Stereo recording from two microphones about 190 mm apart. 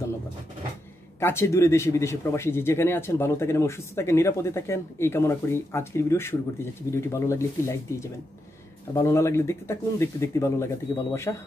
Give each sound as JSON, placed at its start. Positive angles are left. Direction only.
{"t": 1.2, "sound": "speech", "side_deg": 15}